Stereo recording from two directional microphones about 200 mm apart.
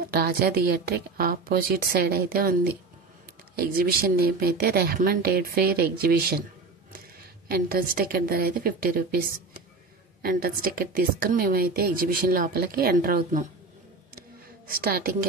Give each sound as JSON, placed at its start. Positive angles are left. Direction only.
{"t": 0.1, "sound": "a woman's voice", "side_deg": -50}
{"t": 3.7, "sound": "a woman's voice", "side_deg": -50}
{"t": 7.4, "sound": "a woman's voice", "side_deg": -50}
{"t": 14.7, "sound": "a woman's voice", "side_deg": -45}